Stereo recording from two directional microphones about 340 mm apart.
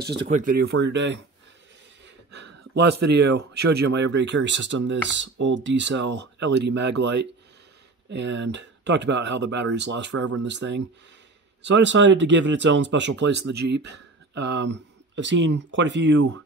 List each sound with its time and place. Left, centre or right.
0.1 s speech: right
2.0 s a sound: right
3.0 s speech: right